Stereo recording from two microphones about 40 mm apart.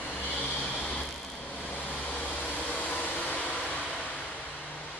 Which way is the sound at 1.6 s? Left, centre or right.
Left.